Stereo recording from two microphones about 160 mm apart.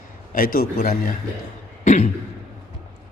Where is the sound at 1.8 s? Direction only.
45° left (ahead or behind).